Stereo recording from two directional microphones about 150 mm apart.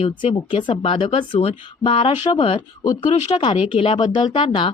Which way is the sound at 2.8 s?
25° left (ahead or behind).